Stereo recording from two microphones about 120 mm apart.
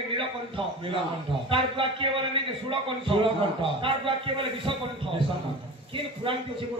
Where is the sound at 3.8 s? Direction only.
45° right (ahead or behind).